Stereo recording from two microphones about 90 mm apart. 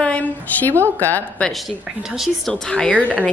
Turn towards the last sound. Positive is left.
turn(degrees=10)  # may be behind; listen again after turning